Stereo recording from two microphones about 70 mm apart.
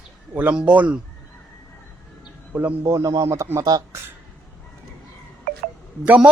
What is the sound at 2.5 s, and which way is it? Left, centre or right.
Speech, right.